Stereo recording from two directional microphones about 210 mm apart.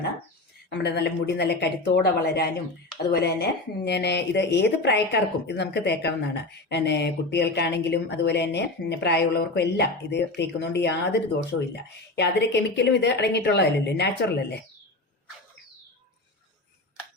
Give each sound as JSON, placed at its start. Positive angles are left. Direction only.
{"t": 0.7, "sound": "speech", "side_deg": 55}